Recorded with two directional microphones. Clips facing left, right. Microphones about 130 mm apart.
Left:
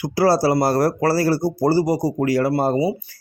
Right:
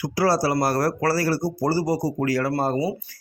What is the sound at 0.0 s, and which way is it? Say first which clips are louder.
Speech: left 4 dB; 25° left (ahead or behind).